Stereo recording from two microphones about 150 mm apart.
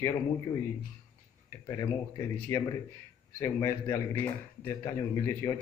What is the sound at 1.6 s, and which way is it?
A man's voice, 20° left (ahead or behind).